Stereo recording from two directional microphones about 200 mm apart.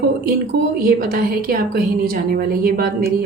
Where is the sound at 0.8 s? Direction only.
45° right (ahead or behind).